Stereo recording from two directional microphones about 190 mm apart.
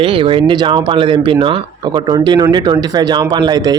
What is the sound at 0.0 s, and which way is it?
A man's voice, 30° right (ahead or behind).